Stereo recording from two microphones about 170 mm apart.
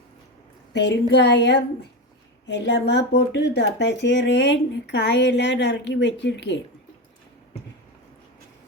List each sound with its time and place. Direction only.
0.7 s speech: 90° left